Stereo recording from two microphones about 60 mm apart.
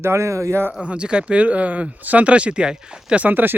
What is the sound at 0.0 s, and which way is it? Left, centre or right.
Speech, right.